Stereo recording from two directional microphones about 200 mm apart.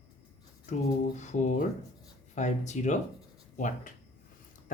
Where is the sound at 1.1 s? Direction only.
35° left (ahead or behind).